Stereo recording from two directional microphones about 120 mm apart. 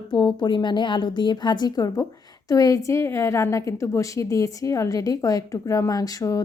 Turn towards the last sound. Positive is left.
turn(degrees=30)  # may be behind; listen again after turning